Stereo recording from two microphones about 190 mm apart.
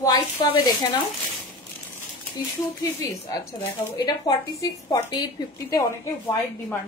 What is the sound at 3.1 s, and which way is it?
A woman's voice, 20° left (ahead or behind).